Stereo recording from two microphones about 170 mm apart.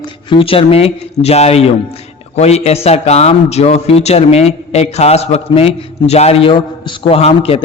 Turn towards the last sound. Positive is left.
turn(degrees=35)  # may be behind; listen again after turning